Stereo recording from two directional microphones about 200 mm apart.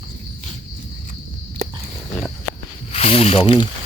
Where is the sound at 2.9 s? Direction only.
30° left (ahead or behind).